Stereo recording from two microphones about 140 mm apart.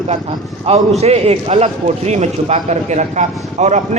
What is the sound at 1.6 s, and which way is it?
A man's voice, 60° right (ahead or behind).